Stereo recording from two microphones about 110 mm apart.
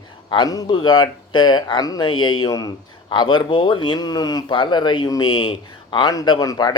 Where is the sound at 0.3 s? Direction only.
40° left (ahead or behind).